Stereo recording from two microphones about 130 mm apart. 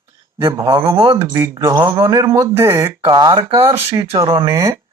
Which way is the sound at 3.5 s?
45° right (ahead or behind).